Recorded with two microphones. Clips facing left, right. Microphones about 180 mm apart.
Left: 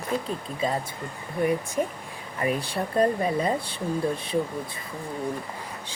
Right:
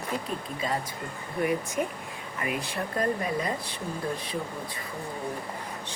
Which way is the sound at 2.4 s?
30° left (ahead or behind).